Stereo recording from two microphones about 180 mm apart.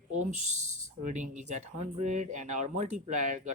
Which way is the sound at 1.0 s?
45° right (ahead or behind).